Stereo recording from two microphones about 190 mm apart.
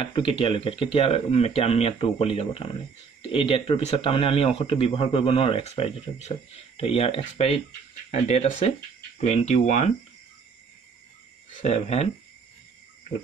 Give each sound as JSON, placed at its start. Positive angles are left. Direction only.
{"t": 0.0, "sound": "speech", "side_deg": 25}
{"t": 11.6, "sound": "speech", "side_deg": 35}